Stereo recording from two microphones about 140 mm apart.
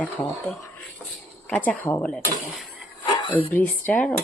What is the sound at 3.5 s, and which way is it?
Speech, 10° left (ahead or behind).